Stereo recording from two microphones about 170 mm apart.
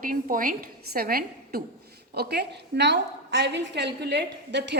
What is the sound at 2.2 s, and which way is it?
A woman's voice, 75° right (ahead or behind).